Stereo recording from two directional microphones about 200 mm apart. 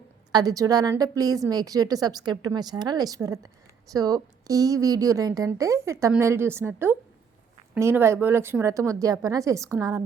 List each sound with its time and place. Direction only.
0.3 s a woman's voice: 20° right (ahead or behind)